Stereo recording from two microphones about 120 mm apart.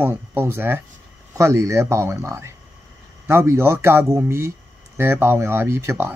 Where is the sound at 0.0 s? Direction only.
20° right (ahead or behind).